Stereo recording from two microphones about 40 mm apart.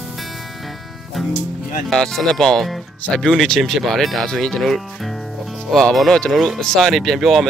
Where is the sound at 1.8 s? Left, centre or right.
Centre.